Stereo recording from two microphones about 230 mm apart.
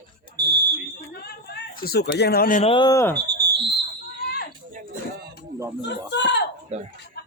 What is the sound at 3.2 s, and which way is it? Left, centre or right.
Fire alarm, right.